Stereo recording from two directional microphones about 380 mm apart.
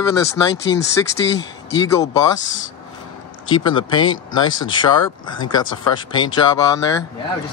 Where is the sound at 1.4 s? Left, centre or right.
Centre.